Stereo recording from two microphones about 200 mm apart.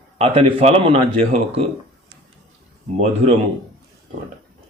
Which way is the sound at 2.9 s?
30° right (ahead or behind).